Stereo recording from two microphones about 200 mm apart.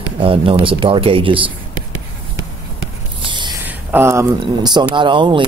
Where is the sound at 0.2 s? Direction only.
25° right (ahead or behind).